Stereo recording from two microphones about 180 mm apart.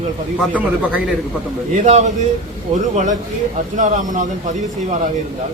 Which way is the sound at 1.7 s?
40° right (ahead or behind).